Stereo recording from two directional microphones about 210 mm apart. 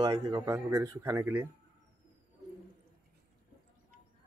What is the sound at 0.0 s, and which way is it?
Speech, 20° right (ahead or behind).